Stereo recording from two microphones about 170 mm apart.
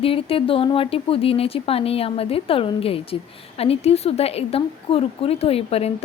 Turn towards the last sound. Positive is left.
turn(degrees=35)  # may be behind; listen again after turning